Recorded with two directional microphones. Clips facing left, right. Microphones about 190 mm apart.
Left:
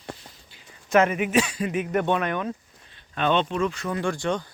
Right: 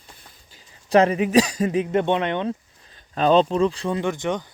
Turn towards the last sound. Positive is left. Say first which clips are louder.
# right 1 dB
turn(degrees=-20)  # may be behind; listen again after turning